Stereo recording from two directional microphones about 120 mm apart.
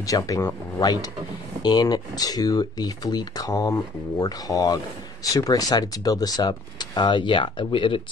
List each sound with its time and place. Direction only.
0.0 s speech: 30° left (ahead or behind)
1.6 s speech: 35° left (ahead or behind)